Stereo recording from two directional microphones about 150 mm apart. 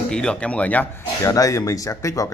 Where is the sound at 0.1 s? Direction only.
5° left (ahead or behind).